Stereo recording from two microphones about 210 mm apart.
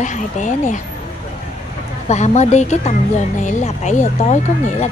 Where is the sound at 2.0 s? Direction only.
35° left (ahead or behind).